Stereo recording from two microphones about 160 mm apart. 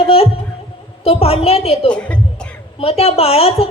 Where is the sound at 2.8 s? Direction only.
40° left (ahead or behind).